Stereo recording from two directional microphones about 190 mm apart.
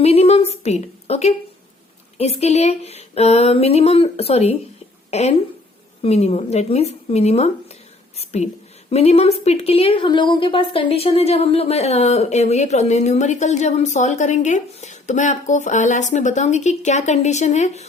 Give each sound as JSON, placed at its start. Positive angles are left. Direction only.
{"t": 0.0, "sound": "a woman's voice", "side_deg": 35}
{"t": 8.1, "sound": "whispering", "side_deg": 35}
{"t": 8.9, "sound": "a woman's voice", "side_deg": 35}